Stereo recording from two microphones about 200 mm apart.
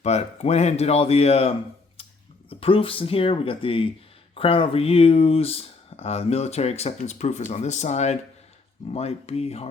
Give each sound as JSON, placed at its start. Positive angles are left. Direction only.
{"t": 0.0, "sound": "speech", "side_deg": 35}